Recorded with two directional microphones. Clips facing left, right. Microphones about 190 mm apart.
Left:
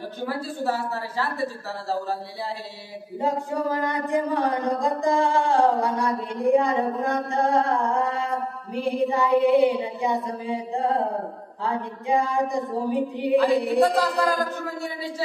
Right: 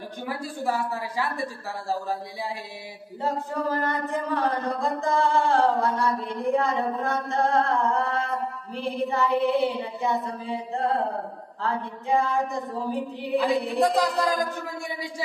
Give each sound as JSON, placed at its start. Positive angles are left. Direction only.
{"t": 0.3, "sound": "a woman's voice", "side_deg": -15}
{"t": 3.2, "sound": "speech", "side_deg": 15}
{"t": 13.8, "sound": "a woman's voice", "side_deg": -15}